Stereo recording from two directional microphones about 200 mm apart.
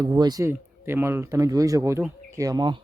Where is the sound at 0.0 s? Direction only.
20° right (ahead or behind).